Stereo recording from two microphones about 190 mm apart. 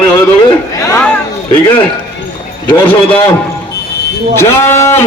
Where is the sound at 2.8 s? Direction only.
30° left (ahead or behind).